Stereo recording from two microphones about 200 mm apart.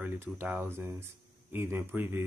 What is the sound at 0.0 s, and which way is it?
Speech, 10° right (ahead or behind).